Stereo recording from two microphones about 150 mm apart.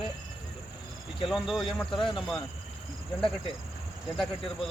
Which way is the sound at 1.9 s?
30° left (ahead or behind).